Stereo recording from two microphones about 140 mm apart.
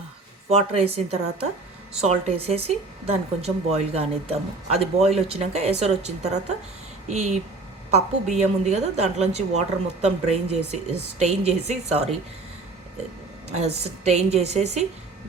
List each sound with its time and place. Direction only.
0.4 s a woman's voice: 45° right (ahead or behind)
13.5 s a woman's voice: 50° right (ahead or behind)